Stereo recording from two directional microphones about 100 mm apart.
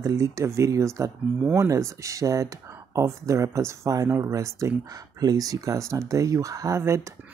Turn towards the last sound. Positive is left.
turn(degrees=-30)  # may be behind; listen again after turning